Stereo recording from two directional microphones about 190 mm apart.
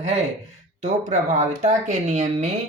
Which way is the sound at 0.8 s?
40° right (ahead or behind).